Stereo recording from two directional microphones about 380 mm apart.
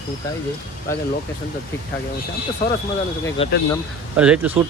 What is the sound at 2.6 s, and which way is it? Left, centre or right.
Speech, left.